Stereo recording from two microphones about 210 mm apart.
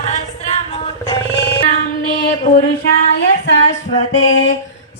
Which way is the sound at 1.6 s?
40° left (ahead or behind).